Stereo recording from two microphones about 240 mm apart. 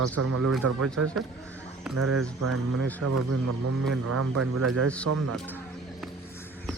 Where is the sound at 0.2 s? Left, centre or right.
Right.